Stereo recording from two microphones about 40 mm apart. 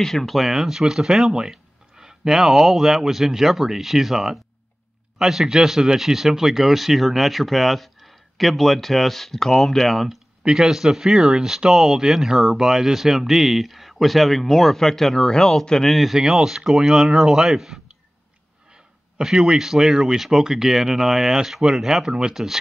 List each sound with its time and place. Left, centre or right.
0.0 s speech: centre
0.4 s speech: centre
10.5 s a man's voice: centre
15.9 s speech: centre
16.2 s speech: centre
19.2 s speech: centre